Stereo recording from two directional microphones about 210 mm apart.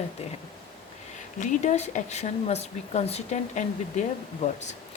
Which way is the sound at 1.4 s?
35° left (ahead or behind).